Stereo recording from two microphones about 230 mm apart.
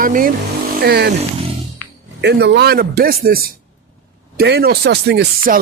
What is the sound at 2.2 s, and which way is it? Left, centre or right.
Speech, right.